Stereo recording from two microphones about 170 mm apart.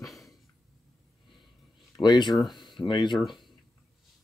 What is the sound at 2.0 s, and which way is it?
Speech, 25° left (ahead or behind).